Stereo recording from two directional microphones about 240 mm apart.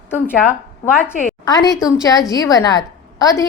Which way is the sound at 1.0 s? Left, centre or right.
Centre.